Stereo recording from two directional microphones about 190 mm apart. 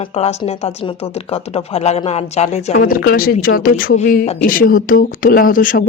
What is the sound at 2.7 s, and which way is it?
Speech, 50° left (ahead or behind).